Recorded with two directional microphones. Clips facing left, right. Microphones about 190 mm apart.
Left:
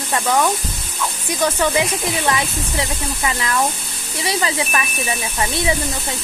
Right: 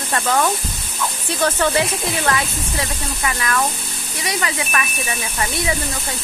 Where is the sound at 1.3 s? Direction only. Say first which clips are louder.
Even; 15° left (ahead or behind).